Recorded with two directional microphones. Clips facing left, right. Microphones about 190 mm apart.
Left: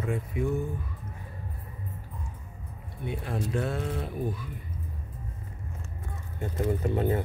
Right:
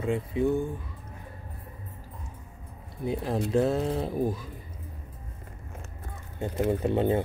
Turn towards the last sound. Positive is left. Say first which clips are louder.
# right 2 dB
turn(degrees=-25)  # may be behind; listen again after turning